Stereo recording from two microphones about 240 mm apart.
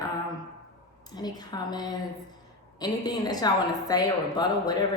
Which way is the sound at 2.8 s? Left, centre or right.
Centre.